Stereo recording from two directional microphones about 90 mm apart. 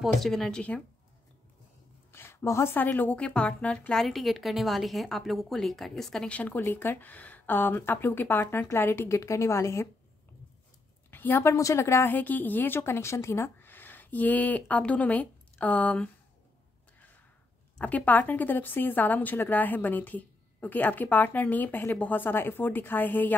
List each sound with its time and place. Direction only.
0.0 s speech: 5° left (ahead or behind)
2.1 s a woman's voice: 30° left (ahead or behind)
11.1 s a woman's voice: 20° left (ahead or behind)
17.7 s a woman's voice: 15° left (ahead or behind)